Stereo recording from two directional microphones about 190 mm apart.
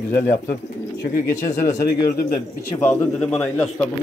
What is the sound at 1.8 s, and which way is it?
A man's voice, 50° left (ahead or behind).